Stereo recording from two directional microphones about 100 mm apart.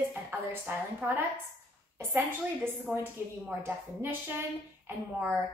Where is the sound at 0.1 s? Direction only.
20° right (ahead or behind).